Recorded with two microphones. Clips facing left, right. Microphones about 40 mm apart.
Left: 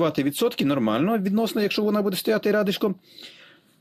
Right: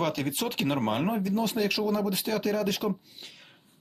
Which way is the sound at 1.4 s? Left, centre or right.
Left.